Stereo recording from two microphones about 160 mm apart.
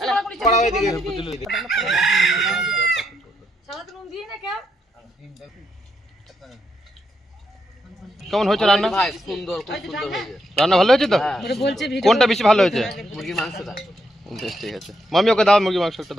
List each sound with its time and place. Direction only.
0.0 s a sound: centre (ahead or behind)
0.4 s a man's voice: 45° left (ahead or behind)
1.3 s a man's voice: centre (ahead or behind)
3.7 s a sound: centre (ahead or behind)
6.2 s vehicle: centre (ahead or behind)
8.1 s a man's voice: centre (ahead or behind)